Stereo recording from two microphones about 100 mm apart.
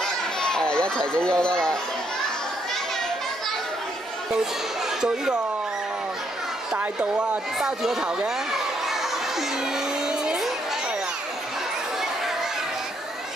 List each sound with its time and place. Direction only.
0.0 s children playing: 5° left (ahead or behind)
5.0 s speech: 5° right (ahead or behind)
6.7 s speech: 10° right (ahead or behind)
10.0 s music: 5° right (ahead or behind)